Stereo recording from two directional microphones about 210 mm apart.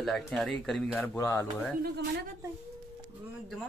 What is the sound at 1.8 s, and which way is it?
Speech, 55° right (ahead or behind).